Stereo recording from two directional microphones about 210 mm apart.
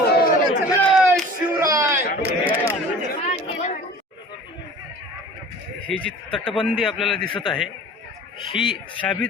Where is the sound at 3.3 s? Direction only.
35° left (ahead or behind).